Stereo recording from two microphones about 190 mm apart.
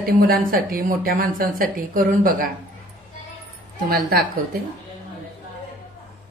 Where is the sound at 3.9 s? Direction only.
50° right (ahead or behind).